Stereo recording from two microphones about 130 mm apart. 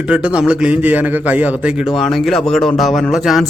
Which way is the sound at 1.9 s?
Centre (ahead or behind).